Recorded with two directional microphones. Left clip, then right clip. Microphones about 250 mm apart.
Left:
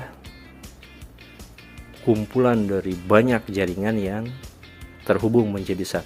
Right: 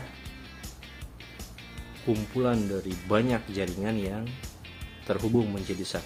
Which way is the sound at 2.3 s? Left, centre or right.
Left.